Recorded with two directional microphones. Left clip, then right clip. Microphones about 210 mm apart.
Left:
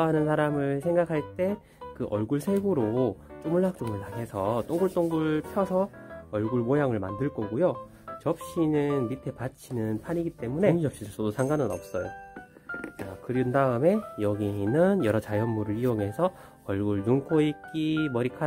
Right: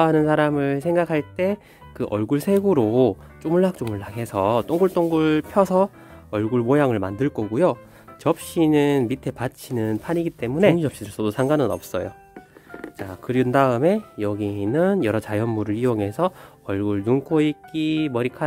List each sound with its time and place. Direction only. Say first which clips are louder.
0.0 s speech: right 7 dB; 25° right (ahead or behind); by 12.0 s 50° right (ahead or behind)
13.0 s speech: right 8 dB; 50° right (ahead or behind)
13.8 s speech: right 4 dB; 15° right (ahead or behind)